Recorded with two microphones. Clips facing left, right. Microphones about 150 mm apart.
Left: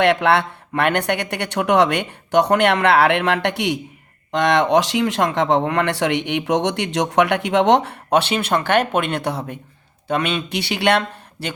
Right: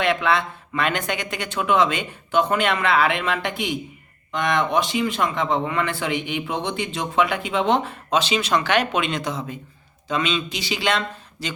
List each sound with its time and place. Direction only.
0.0 s speech: 70° left (ahead or behind)